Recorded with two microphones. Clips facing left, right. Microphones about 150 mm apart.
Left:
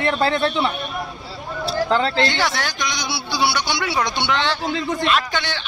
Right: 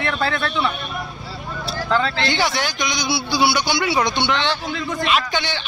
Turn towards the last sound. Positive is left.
turn(degrees=0)  # may be behind; listen again after turning